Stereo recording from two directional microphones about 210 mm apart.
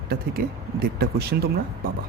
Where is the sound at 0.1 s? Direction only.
45° right (ahead or behind).